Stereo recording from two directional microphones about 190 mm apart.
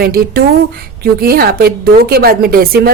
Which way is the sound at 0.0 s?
50° right (ahead or behind).